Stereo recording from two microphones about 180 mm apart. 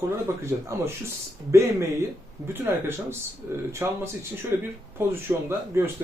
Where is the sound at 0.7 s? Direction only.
15° right (ahead or behind).